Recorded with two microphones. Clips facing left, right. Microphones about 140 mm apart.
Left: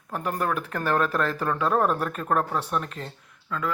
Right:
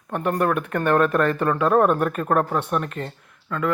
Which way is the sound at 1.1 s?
65° right (ahead or behind).